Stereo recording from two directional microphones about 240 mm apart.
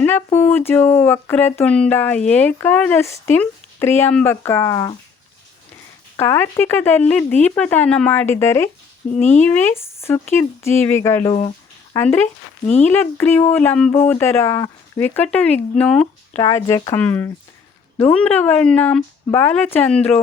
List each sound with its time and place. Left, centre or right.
0.0 s speech: centre
6.1 s speech: centre
9.1 s speech: left
9.4 s speech: centre
16.4 s speech: centre